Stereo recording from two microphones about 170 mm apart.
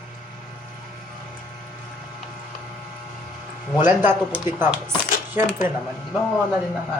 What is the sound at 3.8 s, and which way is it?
Speech, 10° right (ahead or behind).